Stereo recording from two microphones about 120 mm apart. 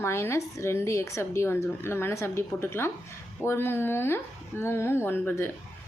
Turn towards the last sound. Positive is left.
turn(degrees=20)  # may be behind; listen again after turning